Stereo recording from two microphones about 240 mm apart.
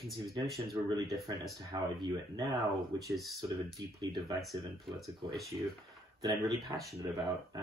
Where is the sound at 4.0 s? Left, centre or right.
Centre.